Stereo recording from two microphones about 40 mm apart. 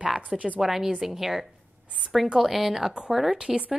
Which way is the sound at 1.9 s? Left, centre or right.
Centre.